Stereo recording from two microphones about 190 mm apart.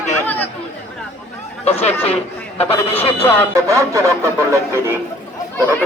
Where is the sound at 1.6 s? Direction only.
35° left (ahead or behind).